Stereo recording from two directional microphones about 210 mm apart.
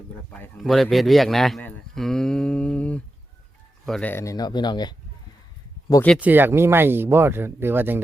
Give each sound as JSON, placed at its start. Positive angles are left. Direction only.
{"t": 0.3, "sound": "a man's voice", "side_deg": 5}
{"t": 5.9, "sound": "speech", "side_deg": 5}
{"t": 6.1, "sound": "speech", "side_deg": -10}